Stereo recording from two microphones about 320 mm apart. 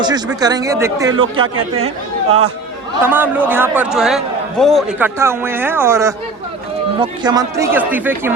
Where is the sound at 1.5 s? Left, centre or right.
Right.